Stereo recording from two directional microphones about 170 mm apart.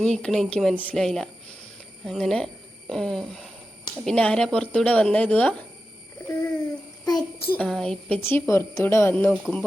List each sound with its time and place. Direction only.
0.0 s a woman's voice: 5° left (ahead or behind)
7.0 s a child's voice: 25° left (ahead or behind)
7.5 s a woman's voice: 5° left (ahead or behind)
8.2 s a woman's voice: 15° left (ahead or behind)